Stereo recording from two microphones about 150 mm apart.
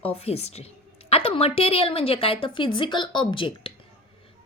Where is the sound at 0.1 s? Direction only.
40° left (ahead or behind).